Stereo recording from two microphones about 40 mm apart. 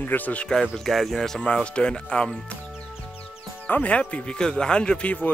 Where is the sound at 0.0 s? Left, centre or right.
Left.